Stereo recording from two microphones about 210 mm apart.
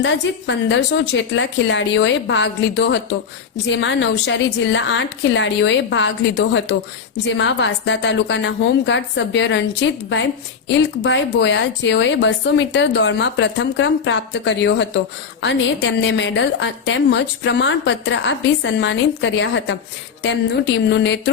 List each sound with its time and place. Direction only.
0.0 s a woman's voice: 60° left (ahead or behind)
11.0 s a woman's voice: 55° left (ahead or behind)